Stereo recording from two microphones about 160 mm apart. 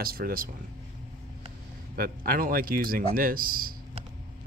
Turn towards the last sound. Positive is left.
turn(degrees=-65)  # may be behind; listen again after turning